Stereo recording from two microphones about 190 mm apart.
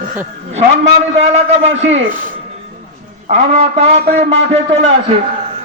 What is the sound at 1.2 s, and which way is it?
Speech, 35° right (ahead or behind).